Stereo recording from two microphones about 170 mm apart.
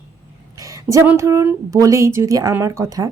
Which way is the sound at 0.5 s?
20° right (ahead or behind).